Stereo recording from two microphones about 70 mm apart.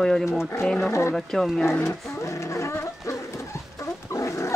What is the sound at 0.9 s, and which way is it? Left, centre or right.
Speech, left.